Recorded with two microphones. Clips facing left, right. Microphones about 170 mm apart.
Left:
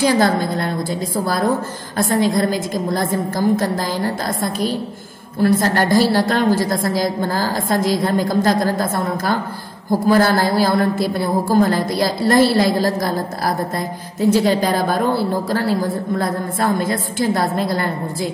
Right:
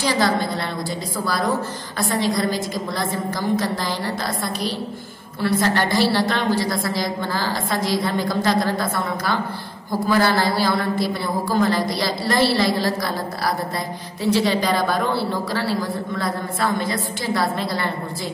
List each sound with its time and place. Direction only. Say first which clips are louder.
0.0 s a woman's voice: left 5 dB; 50° left (ahead or behind)
14.2 s a woman's voice: left 4 dB; 45° left (ahead or behind)